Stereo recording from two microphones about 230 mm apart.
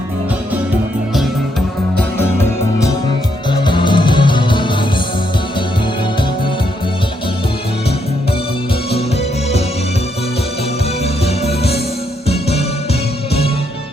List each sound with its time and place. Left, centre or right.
2.0 s music: centre
3.5 s music: left
11.0 s music: left